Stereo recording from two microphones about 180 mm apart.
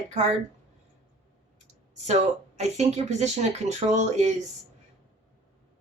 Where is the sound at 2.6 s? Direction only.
40° right (ahead or behind).